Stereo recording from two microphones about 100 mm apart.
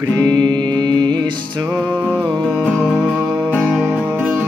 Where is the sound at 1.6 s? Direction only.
40° right (ahead or behind).